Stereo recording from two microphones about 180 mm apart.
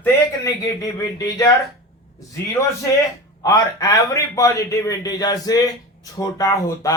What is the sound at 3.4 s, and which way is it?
A man's voice, 20° left (ahead or behind).